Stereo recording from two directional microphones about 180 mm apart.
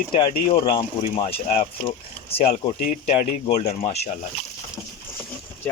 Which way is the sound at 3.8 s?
35° left (ahead or behind).